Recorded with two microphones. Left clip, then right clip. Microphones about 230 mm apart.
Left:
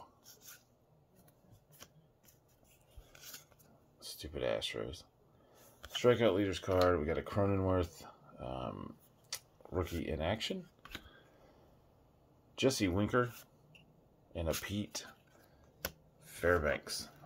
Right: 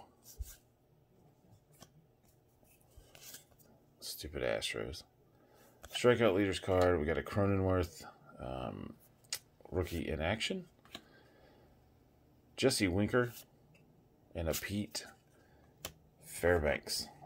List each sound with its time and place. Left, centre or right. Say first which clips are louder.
4.0 s speech: even; centre
12.5 s speech: right 1 dB; centre
14.3 s speech: even; centre
16.3 s speech: right 1 dB; right